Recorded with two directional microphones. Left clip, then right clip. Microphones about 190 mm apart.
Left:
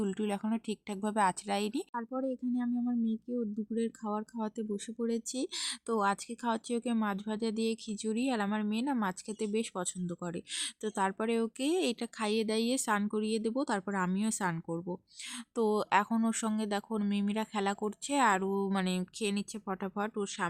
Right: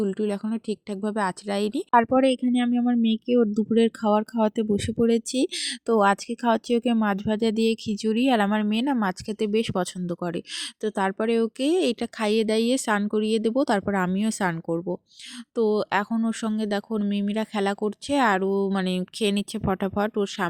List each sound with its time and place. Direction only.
0.0 s speech: 20° right (ahead or behind)
1.9 s speech: 45° right (ahead or behind)
15.5 s speech: 20° right (ahead or behind)